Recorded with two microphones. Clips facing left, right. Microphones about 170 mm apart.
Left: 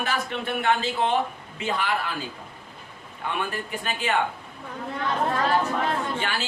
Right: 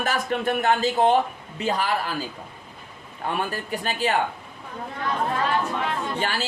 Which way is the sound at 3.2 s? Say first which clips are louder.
Right 2 dB; 35° right (ahead or behind).